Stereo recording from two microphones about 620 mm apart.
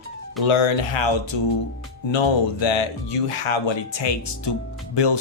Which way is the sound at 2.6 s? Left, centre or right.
Left.